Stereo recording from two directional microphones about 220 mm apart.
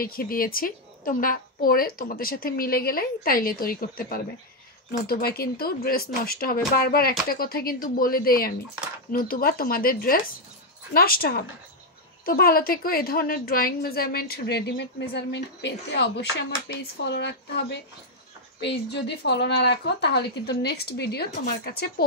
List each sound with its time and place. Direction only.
0.0 s a woman's voice: 40° left (ahead or behind)